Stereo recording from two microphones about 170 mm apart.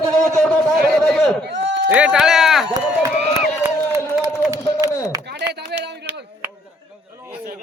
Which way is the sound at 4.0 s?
15° left (ahead or behind).